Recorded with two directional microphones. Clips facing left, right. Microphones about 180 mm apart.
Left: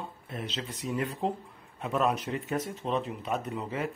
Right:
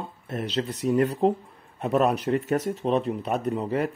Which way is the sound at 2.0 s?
65° right (ahead or behind).